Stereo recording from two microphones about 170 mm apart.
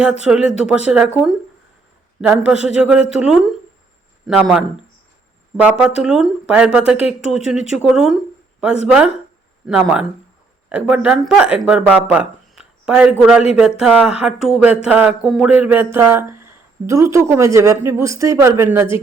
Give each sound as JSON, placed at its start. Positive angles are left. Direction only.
{"t": 0.3, "sound": "speech", "side_deg": -5}
{"t": 9.6, "sound": "speech", "side_deg": -5}